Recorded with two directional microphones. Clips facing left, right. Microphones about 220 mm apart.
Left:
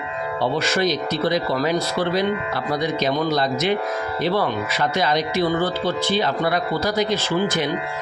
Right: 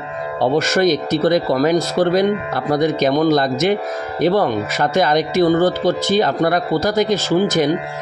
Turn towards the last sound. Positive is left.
turn(degrees=-40)  # may be behind; listen again after turning